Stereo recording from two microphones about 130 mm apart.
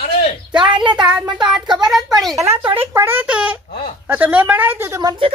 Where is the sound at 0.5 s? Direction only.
40° right (ahead or behind).